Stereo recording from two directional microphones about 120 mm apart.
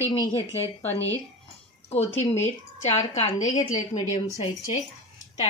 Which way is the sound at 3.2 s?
90° left.